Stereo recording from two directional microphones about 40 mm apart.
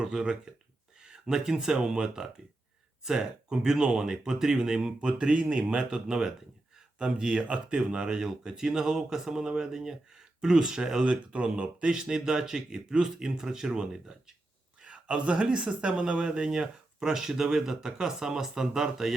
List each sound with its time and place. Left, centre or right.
0.0 s speech: centre
6.7 s a sound: right
7.4 s speech: right
11.0 s speech: right; by 14.3 s centre
14.8 s speech: right; by 19.1 s centre